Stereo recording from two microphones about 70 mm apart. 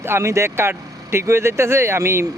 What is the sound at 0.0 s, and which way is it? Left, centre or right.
Speech, right.